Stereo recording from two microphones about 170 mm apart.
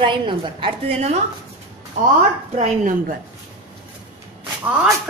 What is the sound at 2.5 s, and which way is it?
Speech, 45° right (ahead or behind).